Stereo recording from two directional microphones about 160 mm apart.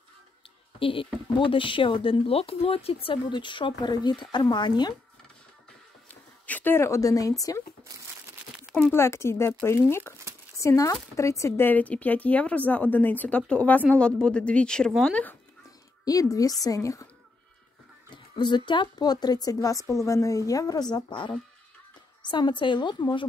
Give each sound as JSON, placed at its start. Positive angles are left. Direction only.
{"t": 0.7, "sound": "speech", "side_deg": 35}
{"t": 6.0, "sound": "speech", "side_deg": 10}
{"t": 8.9, "sound": "speech", "side_deg": 15}
{"t": 16.1, "sound": "a woman's voice", "side_deg": 20}
{"t": 18.1, "sound": "a woman's voice", "side_deg": 30}